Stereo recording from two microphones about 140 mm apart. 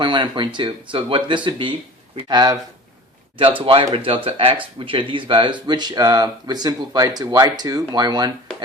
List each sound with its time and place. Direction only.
0.0 s speech: 35° right (ahead or behind)
3.3 s speech: 40° right (ahead or behind)